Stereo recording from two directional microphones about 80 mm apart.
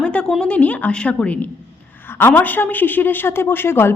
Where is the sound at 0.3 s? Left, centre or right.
Centre.